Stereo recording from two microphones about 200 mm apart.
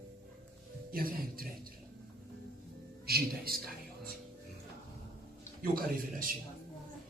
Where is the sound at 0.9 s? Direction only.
45° right (ahead or behind).